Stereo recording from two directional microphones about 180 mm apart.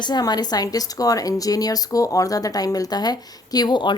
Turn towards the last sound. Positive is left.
turn(degrees=25)  # may be behind; listen again after turning